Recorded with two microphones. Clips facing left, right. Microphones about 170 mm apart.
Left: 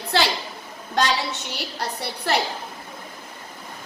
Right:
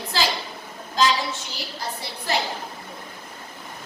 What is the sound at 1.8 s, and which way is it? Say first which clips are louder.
Speech: left 3 dB; 65° left (ahead or behind).